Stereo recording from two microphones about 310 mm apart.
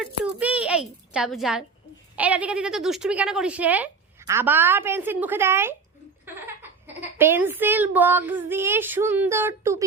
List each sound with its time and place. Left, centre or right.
0.0 s a child's voice: centre